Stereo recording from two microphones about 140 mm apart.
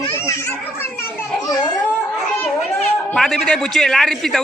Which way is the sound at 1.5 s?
30° left (ahead or behind).